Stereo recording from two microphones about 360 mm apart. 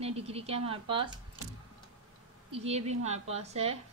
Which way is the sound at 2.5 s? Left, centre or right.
Centre.